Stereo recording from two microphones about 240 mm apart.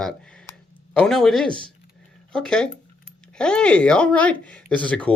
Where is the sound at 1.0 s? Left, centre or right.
Centre.